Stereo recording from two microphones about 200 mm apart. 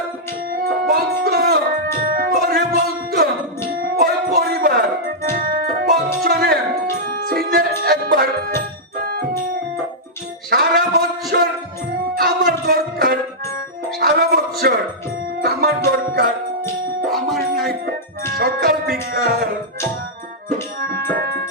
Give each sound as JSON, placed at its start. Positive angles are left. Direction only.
{"t": 0.5, "sound": "music", "side_deg": -50}
{"t": 10.5, "sound": "music", "side_deg": -45}
{"t": 17.1, "sound": "music", "side_deg": 0}
{"t": 18.3, "sound": "music", "side_deg": -45}
{"t": 20.8, "sound": "music", "side_deg": -50}